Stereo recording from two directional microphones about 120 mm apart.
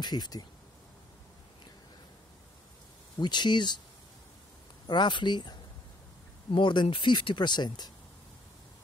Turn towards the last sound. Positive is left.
turn(degrees=35)  # may be behind; listen again after turning